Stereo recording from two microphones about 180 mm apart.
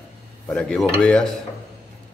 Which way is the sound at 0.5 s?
5° left (ahead or behind).